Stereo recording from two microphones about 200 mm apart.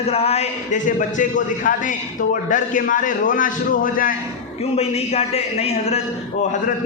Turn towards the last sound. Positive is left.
turn(degrees=30)  # may be behind; listen again after turning